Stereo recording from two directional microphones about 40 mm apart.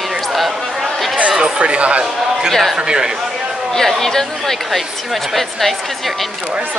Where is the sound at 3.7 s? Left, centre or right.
Centre.